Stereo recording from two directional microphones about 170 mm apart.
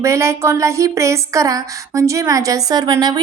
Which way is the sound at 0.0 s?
15° right (ahead or behind).